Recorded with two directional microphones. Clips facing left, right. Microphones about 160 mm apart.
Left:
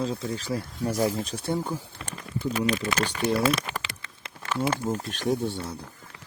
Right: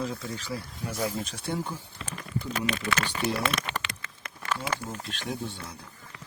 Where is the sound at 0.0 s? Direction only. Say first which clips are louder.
Left 4 dB; 30° left (ahead or behind).